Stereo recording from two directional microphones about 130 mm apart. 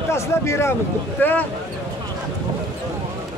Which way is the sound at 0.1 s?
20° left (ahead or behind).